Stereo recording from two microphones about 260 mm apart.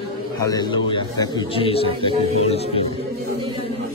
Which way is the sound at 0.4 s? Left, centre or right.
Centre.